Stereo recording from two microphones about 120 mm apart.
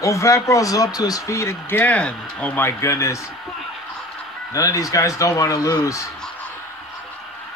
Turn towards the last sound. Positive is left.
turn(degrees=30)  # may be behind; listen again after turning